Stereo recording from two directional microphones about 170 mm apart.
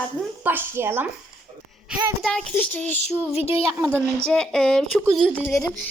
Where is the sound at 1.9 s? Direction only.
Centre (ahead or behind).